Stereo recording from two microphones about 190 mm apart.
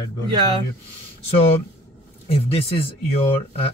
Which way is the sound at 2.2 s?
30° left (ahead or behind).